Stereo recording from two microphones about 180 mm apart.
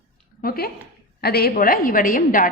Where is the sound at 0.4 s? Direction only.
55° left (ahead or behind).